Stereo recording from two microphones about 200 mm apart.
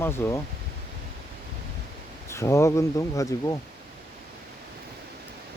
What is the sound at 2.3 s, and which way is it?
Speech, 15° left (ahead or behind).